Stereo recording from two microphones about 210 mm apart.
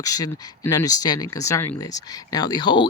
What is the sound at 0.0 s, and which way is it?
Speech, 15° left (ahead or behind).